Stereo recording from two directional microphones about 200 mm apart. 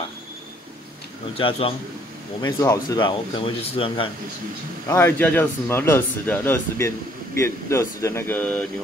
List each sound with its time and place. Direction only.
1.3 s speech: 30° left (ahead or behind)
2.4 s speech: 20° left (ahead or behind)
4.8 s speech: 10° left (ahead or behind)